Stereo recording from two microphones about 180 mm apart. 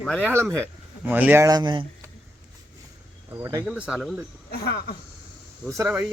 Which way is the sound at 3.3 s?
20° right (ahead or behind).